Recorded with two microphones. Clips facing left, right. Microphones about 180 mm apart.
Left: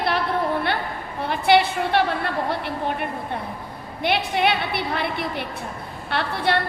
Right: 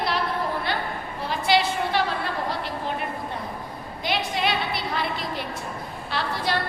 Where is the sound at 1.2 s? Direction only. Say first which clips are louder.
Left 5 dB; 60° left (ahead or behind).